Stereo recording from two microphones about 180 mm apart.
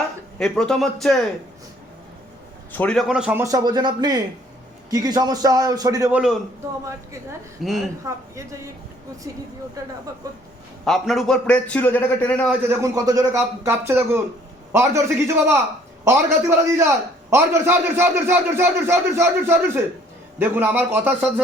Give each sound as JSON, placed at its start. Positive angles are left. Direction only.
{"t": 0.3, "sound": "a man's voice", "side_deg": 5}
{"t": 2.7, "sound": "a man's voice", "side_deg": 5}
{"t": 3.4, "sound": "speech", "side_deg": -20}
{"t": 6.1, "sound": "a man's voice", "side_deg": -5}
{"t": 7.6, "sound": "a man's voice", "side_deg": 0}
{"t": 8.0, "sound": "a man's voice", "side_deg": -15}
{"t": 10.8, "sound": "a man's voice", "side_deg": 0}
{"t": 12.5, "sound": "a man's voice", "side_deg": -15}